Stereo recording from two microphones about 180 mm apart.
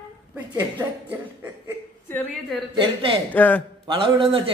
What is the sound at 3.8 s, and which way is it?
Speech, 30° right (ahead or behind).